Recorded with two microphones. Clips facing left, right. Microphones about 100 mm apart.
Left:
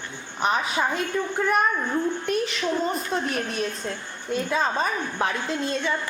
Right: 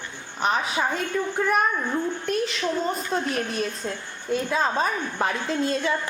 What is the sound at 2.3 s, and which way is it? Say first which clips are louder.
A woman's voice: even; 5° left (ahead or behind).